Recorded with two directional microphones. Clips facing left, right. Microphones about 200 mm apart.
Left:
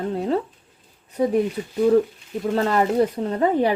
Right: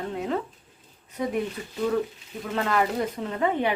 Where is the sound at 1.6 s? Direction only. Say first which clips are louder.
Left 8 dB; 15° left (ahead or behind).